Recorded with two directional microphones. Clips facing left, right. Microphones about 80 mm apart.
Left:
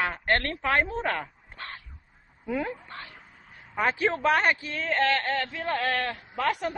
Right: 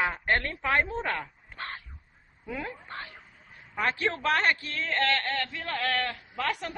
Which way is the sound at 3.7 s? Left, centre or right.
Centre.